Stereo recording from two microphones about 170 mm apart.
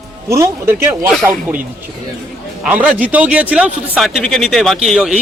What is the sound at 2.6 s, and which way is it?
Speech, 10° right (ahead or behind).